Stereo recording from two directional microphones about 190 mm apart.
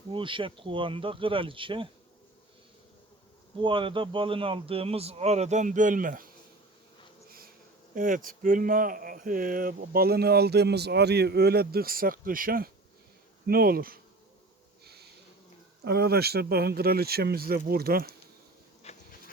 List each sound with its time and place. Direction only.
0.1 s speech: 25° right (ahead or behind)
3.6 s a man's voice: 25° right (ahead or behind); by 6.2 s 45° right (ahead or behind)
7.9 s speech: 45° right (ahead or behind)
15.8 s speech: 55° right (ahead or behind)
18.8 s a sound: 35° left (ahead or behind)